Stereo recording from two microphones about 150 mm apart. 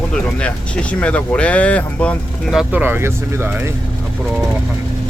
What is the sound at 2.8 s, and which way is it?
Speech, 15° right (ahead or behind).